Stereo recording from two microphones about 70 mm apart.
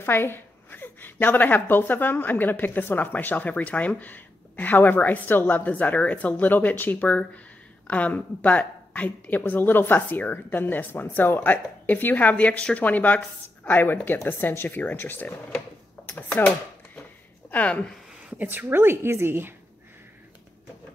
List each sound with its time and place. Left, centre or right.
0.0 s a woman's voice: left; by 17.9 s centre
18.4 s a woman's voice: right